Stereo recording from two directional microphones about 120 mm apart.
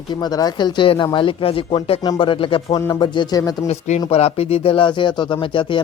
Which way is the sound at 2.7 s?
35° left (ahead or behind).